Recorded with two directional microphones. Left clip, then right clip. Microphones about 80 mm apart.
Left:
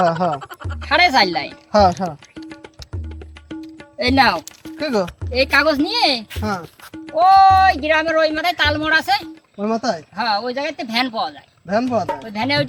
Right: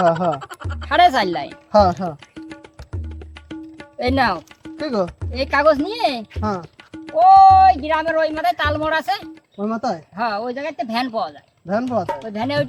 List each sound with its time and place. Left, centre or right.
0.0 s speech: centre
0.9 s a woman's voice: right
1.7 s speech: right
2.3 s music: centre
3.9 s speech: right
6.9 s music: centre
7.2 s speech: right
12.0 s speech: centre
12.3 s speech: right